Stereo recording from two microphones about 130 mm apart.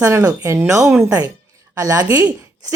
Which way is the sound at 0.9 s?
10° right (ahead or behind).